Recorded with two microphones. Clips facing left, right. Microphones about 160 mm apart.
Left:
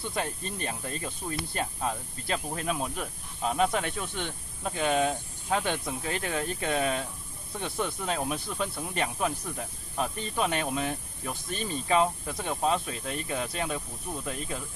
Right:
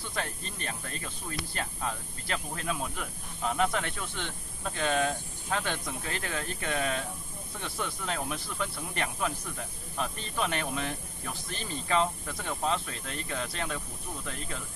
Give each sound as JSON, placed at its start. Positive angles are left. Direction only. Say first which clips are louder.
{"t": 0.1, "sound": "speech", "louder": "left 1 dB", "side_deg": 20}